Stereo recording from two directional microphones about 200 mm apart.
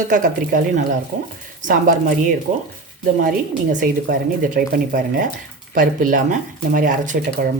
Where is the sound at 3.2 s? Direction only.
40° right (ahead or behind).